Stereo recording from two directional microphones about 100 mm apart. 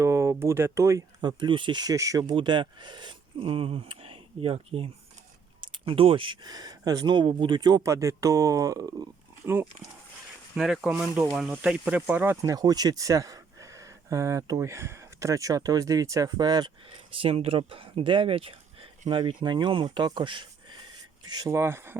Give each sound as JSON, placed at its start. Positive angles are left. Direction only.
{"t": 0.0, "sound": "speech", "side_deg": -30}
{"t": 1.2, "sound": "speech", "side_deg": -45}
{"t": 2.2, "sound": "speech", "side_deg": -50}
{"t": 5.5, "sound": "speech", "side_deg": -55}
{"t": 7.9, "sound": "speech", "side_deg": -30}
{"t": 9.5, "sound": "speech", "side_deg": -25}
{"t": 10.5, "sound": "speech", "side_deg": -5}
{"t": 12.4, "sound": "speech", "side_deg": -40}
{"t": 17.1, "sound": "speech", "side_deg": -70}
{"t": 19.1, "sound": "speech", "side_deg": -50}
{"t": 21.5, "sound": "speech", "side_deg": -25}